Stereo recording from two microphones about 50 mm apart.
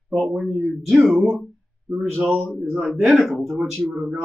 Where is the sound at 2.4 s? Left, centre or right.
Centre.